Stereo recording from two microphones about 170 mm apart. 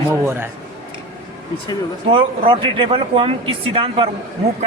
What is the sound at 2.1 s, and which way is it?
Speech, 30° right (ahead or behind).